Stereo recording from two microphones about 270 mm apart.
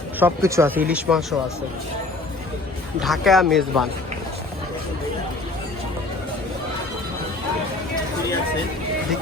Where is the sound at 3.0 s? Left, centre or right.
Centre.